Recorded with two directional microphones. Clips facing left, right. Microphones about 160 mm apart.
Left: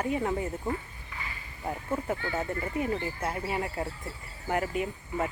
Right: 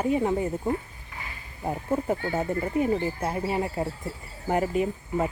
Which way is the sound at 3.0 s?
25° right (ahead or behind).